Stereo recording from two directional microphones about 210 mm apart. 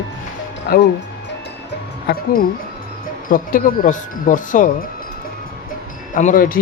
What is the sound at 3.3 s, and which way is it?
Speech, 40° left (ahead or behind).